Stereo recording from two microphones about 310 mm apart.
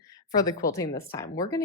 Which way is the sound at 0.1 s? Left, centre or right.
Centre.